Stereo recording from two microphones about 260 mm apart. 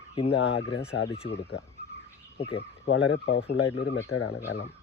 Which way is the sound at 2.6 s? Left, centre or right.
Left.